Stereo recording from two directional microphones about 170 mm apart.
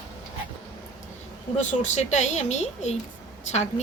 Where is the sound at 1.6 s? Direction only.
45° left (ahead or behind).